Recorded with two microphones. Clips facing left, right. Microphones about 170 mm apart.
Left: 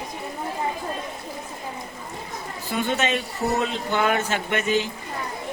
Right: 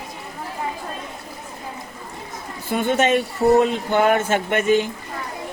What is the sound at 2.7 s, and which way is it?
A man's voice, 50° right (ahead or behind).